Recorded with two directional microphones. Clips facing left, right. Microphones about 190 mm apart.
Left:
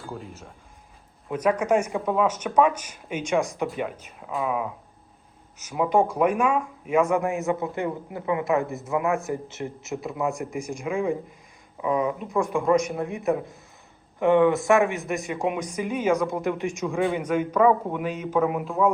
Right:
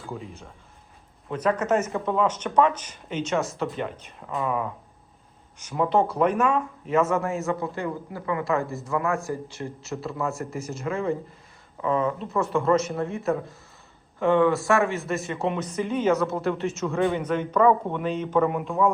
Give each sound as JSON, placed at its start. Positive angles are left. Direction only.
{"t": 0.0, "sound": "speech", "side_deg": 0}